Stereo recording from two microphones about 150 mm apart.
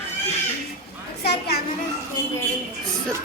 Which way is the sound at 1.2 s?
90° left.